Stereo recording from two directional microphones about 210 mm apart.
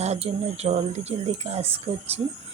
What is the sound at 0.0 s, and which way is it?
Speech, 30° right (ahead or behind).